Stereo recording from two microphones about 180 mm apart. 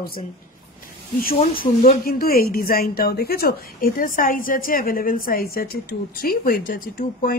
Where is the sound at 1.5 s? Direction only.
50° left (ahead or behind).